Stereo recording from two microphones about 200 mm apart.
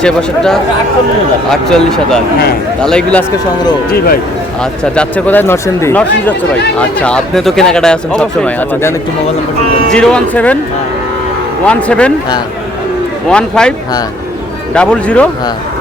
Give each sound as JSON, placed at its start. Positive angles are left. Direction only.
{"t": 0.0, "sound": "speech", "side_deg": 5}
{"t": 3.8, "sound": "speech", "side_deg": 50}
{"t": 4.9, "sound": "speech", "side_deg": 5}
{"t": 11.6, "sound": "speech", "side_deg": 5}
{"t": 13.3, "sound": "speech", "side_deg": 5}